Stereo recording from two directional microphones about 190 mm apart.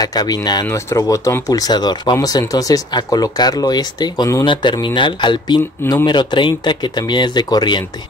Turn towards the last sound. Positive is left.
turn(degrees=20)  # may be behind; listen again after turning